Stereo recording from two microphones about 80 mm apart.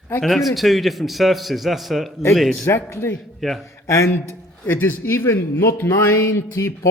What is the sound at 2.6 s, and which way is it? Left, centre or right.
Speech, left.